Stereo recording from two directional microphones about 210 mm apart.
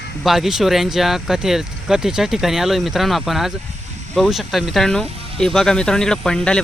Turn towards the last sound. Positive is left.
turn(degrees=5)  # may be behind; listen again after turning